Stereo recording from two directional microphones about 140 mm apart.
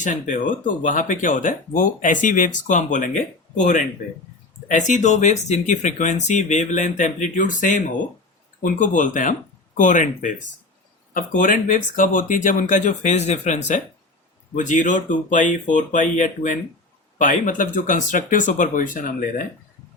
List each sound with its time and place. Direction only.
0.0 s speech: 65° left (ahead or behind); by 19.5 s 85° left